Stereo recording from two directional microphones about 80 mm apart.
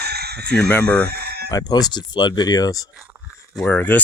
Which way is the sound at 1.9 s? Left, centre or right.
Left.